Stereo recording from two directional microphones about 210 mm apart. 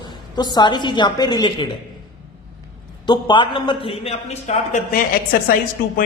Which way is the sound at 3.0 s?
25° left (ahead or behind).